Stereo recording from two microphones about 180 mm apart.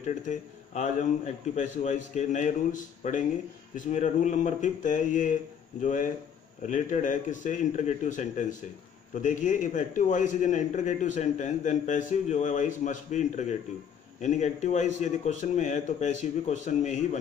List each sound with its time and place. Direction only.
0.0 s a man's voice: 40° left (ahead or behind)